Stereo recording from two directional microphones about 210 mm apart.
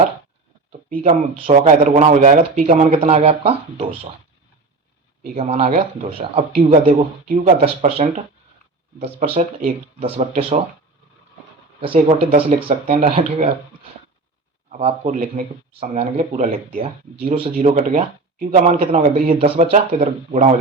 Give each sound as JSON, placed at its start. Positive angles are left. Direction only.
{"t": 1.5, "sound": "speech", "side_deg": -35}
{"t": 5.3, "sound": "speech", "side_deg": -30}
{"t": 9.4, "sound": "speech", "side_deg": -40}
{"t": 10.0, "sound": "speech", "side_deg": -30}
{"t": 11.8, "sound": "speech", "side_deg": -30}
{"t": 14.7, "sound": "speech", "side_deg": -30}